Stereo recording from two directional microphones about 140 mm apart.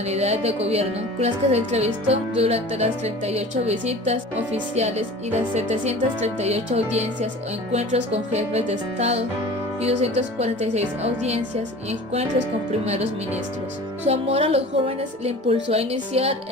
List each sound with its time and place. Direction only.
0.1 s speech: 50° right (ahead or behind)
12.8 s speech: 50° right (ahead or behind)